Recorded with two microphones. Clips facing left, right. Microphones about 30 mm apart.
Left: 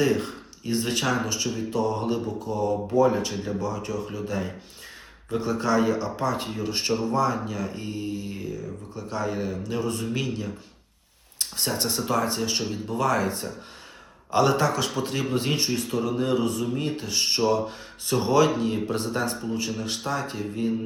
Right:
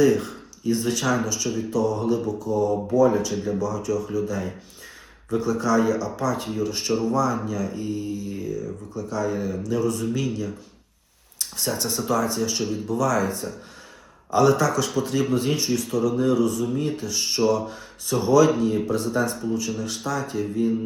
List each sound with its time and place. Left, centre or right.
0.0 s speech: left